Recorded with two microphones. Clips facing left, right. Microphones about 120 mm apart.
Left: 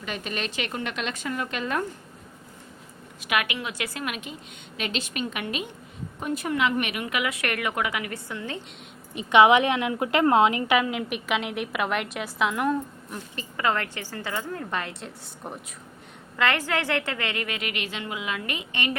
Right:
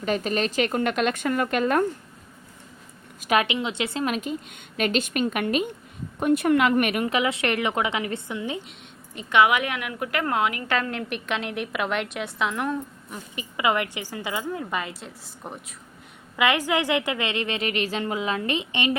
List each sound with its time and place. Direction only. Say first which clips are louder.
0.0 s a woman's voice: right 8 dB; 40° right (ahead or behind)
3.2 s a woman's voice: right 5 dB; 35° right (ahead or behind)
3.5 s a woman's voice: right 5 dB; 20° right (ahead or behind); by 4.4 s 40° right (ahead or behind)
4.8 s a woman's voice: right 7 dB; 50° right (ahead or behind)
6.1 s speech: right 7 dB; 60° right (ahead or behind)
7.0 s a woman's voice: right 5 dB; 30° right (ahead or behind)
9.1 s speech: left 3 dB; 20° left (ahead or behind)
10.7 s a woman's voice: left 3 dB; 10° left (ahead or behind)
13.3 s a woman's voice: right 2 dB; 15° right (ahead or behind)
16.4 s a woman's voice: right 3 dB; 15° right (ahead or behind)